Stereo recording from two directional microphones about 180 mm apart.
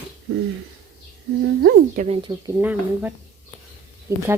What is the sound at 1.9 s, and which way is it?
Speech, 40° right (ahead or behind).